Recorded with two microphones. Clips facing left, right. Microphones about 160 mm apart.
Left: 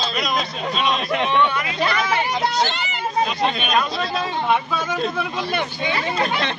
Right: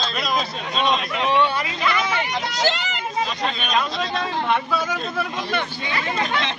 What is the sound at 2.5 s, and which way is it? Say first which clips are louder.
Speech: even; 90° right.